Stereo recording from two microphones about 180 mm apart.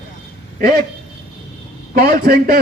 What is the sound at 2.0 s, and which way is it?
Speech, 55° right (ahead or behind).